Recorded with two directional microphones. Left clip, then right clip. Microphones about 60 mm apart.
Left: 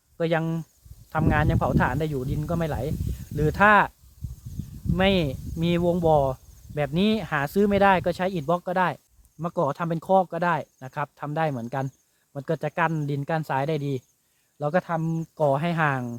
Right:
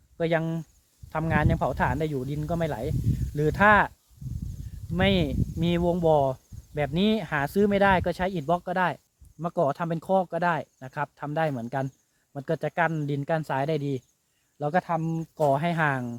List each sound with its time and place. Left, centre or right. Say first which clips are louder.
0.2 s speech: left 1 dB; left
4.9 s speech: left 2 dB; left